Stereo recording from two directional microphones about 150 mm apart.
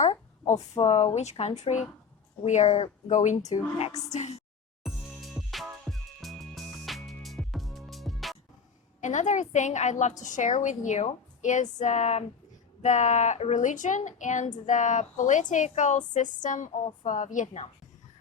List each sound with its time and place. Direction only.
0.8 s a woman's voice: 40° left (ahead or behind)
4.8 s music: centre (ahead or behind)
9.0 s a woman's voice: 55° left (ahead or behind)